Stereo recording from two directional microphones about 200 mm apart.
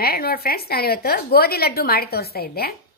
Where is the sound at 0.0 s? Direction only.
50° left (ahead or behind).